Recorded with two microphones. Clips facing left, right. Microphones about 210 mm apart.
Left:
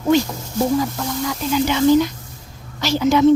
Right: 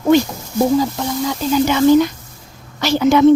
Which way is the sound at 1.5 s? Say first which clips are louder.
Right 3 dB; 50° right (ahead or behind).